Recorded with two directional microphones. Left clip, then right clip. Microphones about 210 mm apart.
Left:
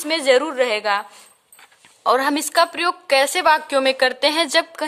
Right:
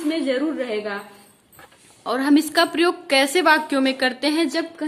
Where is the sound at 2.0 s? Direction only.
40° left (ahead or behind).